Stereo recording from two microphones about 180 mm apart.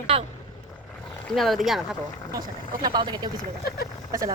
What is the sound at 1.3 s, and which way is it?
Speech, centre (ahead or behind).